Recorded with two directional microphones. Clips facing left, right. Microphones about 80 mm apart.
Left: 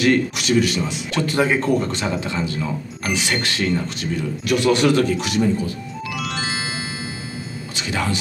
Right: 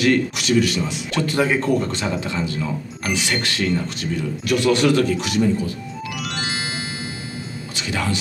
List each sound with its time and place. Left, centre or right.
0.0 s speech: left
7.7 s speech: left